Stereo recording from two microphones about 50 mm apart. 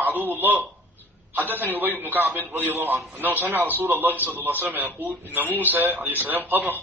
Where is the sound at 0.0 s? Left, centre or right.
Right.